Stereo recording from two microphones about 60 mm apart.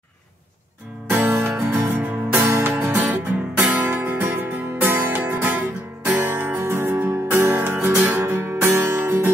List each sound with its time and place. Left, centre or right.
1.1 s music: right
3.8 s guitar: right
4.2 s music: right
6.2 s music: right